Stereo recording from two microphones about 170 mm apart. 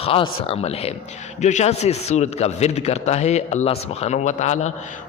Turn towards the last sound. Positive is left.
turn(degrees=45)  # may be behind; listen again after turning